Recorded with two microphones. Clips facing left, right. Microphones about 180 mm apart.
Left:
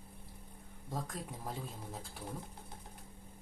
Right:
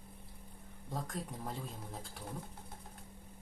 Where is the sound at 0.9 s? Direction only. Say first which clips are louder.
Even; centre (ahead or behind).